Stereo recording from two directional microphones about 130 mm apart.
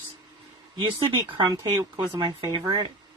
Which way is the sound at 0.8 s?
40° right (ahead or behind).